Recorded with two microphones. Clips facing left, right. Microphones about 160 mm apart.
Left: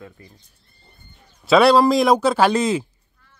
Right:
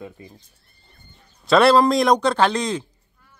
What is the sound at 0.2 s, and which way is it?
Speech, 20° right (ahead or behind).